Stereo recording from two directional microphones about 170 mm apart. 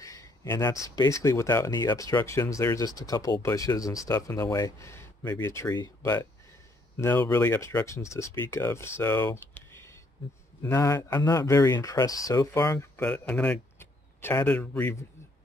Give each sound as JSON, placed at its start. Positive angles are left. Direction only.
{"t": 0.0, "sound": "speech", "side_deg": 20}